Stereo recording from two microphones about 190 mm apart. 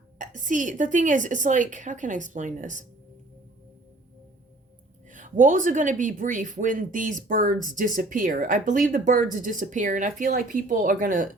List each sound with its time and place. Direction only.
0.2 s a woman's voice: 40° right (ahead or behind)
5.1 s speech: 40° right (ahead or behind)